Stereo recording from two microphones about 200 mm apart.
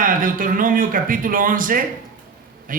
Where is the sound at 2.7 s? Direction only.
45° right (ahead or behind).